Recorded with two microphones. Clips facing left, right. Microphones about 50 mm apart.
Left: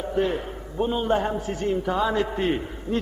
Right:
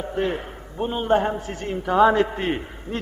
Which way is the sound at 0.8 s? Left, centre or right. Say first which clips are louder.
Right 2 dB; right.